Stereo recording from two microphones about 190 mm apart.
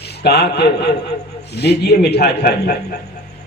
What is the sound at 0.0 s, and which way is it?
A man's voice, 60° left (ahead or behind).